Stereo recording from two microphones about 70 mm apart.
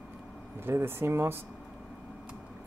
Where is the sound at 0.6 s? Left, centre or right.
Right.